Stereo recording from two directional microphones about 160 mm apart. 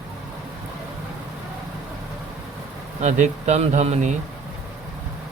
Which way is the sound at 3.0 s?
45° right (ahead or behind).